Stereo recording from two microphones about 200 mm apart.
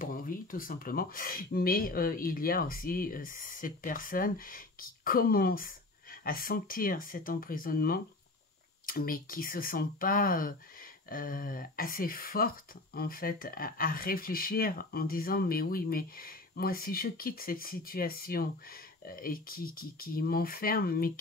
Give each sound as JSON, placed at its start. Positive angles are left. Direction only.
{"t": 0.0, "sound": "speech", "side_deg": 45}